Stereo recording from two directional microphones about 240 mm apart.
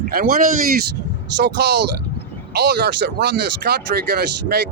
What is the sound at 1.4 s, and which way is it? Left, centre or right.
Speech, right.